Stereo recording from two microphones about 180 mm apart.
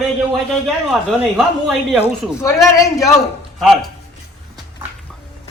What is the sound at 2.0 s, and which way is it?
Speech, 15° left (ahead or behind).